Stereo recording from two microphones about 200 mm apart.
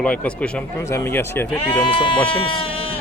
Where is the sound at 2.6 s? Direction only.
25° left (ahead or behind).